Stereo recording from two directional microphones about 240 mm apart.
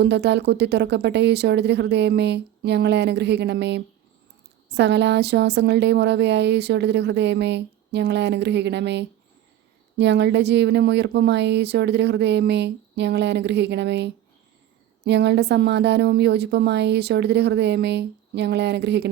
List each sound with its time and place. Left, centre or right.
0.0 s speech: right